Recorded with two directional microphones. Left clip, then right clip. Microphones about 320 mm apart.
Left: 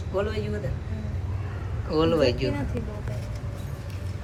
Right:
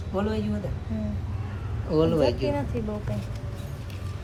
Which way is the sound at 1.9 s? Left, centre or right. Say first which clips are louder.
Even; centre.